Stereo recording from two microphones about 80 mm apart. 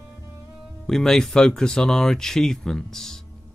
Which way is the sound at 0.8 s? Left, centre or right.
Centre.